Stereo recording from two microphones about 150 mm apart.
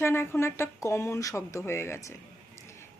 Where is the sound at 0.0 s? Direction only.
15° left (ahead or behind).